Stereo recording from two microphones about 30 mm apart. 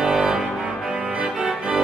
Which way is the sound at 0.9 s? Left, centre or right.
Right.